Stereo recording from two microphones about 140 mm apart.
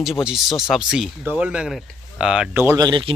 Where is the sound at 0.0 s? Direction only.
Centre (ahead or behind).